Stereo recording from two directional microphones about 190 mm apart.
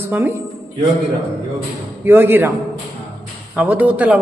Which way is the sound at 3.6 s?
10° right (ahead or behind).